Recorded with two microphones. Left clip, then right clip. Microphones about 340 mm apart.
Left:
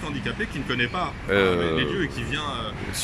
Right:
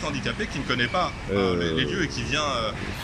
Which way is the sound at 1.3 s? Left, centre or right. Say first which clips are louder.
Left 5 dB; left.